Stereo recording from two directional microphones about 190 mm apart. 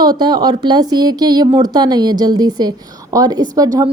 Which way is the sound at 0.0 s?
20° right (ahead or behind).